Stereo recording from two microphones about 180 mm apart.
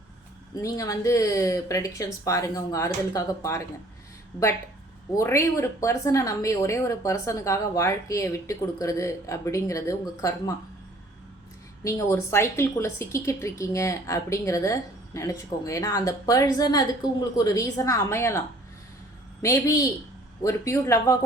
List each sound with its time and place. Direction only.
0.5 s a woman's voice: 20° left (ahead or behind)
5.1 s a woman's voice: 15° left (ahead or behind)
11.8 s a woman's voice: 15° left (ahead or behind)